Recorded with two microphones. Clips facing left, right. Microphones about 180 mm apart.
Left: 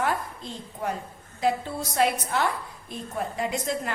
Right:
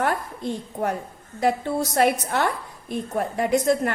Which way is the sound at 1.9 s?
60° right (ahead or behind).